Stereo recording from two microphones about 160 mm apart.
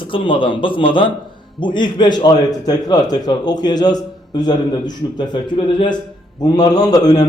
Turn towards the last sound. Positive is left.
turn(degrees=25)  # may be behind; listen again after turning